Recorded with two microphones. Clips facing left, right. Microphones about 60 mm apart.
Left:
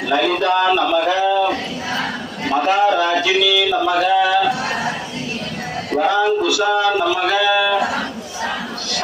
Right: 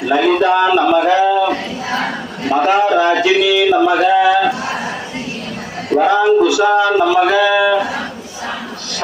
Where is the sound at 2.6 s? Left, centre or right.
Right.